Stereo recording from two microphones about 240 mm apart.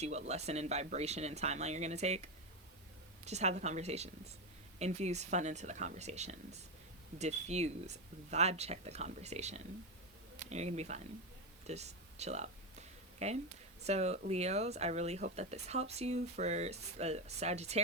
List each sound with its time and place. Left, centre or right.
0.0 s speech: right